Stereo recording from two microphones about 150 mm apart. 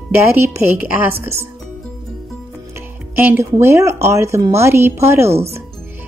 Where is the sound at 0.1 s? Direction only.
15° right (ahead or behind).